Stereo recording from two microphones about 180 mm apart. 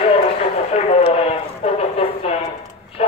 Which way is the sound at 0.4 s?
35° left (ahead or behind).